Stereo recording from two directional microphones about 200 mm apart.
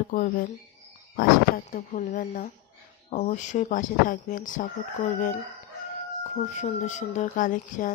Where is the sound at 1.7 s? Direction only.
40° left (ahead or behind).